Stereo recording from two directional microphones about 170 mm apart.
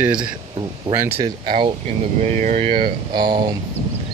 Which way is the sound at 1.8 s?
40° right (ahead or behind).